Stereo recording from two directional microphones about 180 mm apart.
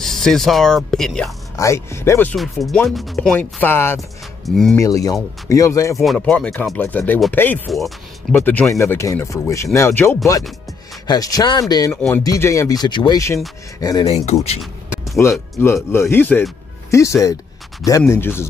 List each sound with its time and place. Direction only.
0.0 s speech: centre (ahead or behind)
1.6 s speech: 15° left (ahead or behind)
2.3 s speech: centre (ahead or behind); by 5.9 s 15° left (ahead or behind)
5.9 s speech: 5° left (ahead or behind)
8.4 s speech: 10° left (ahead or behind)
11.9 s speech: 5° left (ahead or behind)
12.2 s speech: 15° left (ahead or behind)
14.0 s speech: 35° left (ahead or behind)
15.6 s speech: 15° left (ahead or behind)